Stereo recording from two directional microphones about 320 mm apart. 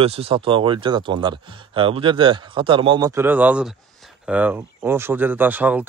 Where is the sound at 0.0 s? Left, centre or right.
Centre.